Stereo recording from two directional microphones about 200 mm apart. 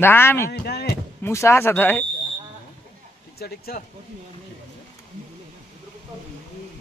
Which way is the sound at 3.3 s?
50° left (ahead or behind).